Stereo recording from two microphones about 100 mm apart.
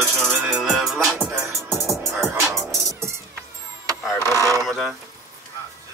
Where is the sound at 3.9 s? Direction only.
35° right (ahead or behind).